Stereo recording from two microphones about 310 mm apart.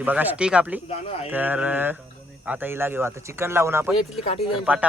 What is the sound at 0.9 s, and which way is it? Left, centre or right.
Speech, centre.